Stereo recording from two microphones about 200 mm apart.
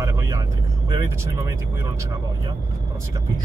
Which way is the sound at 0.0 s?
15° right (ahead or behind).